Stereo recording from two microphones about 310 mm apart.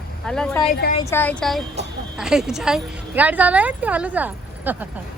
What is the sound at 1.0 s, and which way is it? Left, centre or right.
A woman's voice, centre.